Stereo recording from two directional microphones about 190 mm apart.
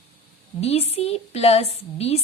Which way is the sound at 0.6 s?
35° left (ahead or behind).